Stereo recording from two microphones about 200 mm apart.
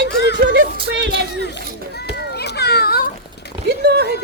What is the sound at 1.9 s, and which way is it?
Children playing, 55° left (ahead or behind).